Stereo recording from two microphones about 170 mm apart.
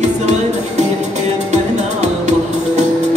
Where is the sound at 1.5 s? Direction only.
40° right (ahead or behind).